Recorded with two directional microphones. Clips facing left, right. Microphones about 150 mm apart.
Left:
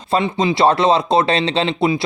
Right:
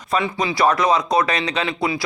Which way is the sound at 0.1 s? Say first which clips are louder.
Left 4 dB; 25° left (ahead or behind).